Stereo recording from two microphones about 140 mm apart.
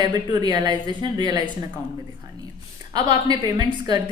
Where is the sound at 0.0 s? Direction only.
30° right (ahead or behind).